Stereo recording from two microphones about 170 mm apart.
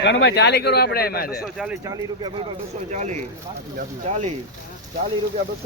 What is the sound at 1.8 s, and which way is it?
Speech, 20° right (ahead or behind).